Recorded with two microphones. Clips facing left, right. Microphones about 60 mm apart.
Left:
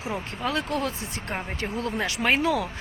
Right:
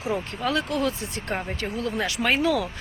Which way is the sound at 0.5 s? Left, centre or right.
Left.